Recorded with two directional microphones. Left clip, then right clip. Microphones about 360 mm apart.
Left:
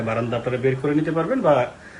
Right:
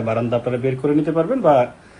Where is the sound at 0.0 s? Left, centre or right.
Centre.